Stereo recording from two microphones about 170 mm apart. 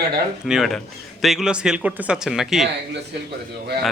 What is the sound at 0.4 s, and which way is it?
Speech, centre (ahead or behind).